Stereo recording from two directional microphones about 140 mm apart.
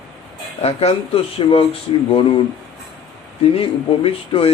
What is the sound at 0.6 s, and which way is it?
Speech, 45° left (ahead or behind).